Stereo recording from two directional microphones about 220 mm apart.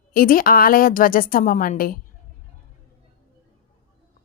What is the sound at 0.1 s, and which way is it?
A woman's voice, 40° left (ahead or behind).